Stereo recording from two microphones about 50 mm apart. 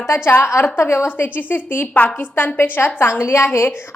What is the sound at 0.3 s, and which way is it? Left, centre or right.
A woman's voice, left.